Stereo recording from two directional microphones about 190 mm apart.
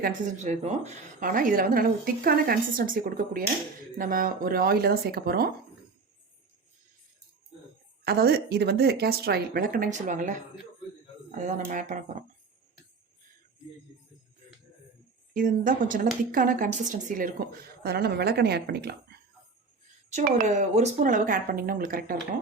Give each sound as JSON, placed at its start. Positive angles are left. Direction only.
{"t": 0.0, "sound": "a woman's voice", "side_deg": -40}
{"t": 8.0, "sound": "a woman's voice", "side_deg": -55}
{"t": 11.4, "sound": "speech", "side_deg": -40}
{"t": 15.3, "sound": "a woman's voice", "side_deg": -45}
{"t": 20.1, "sound": "a woman's voice", "side_deg": -40}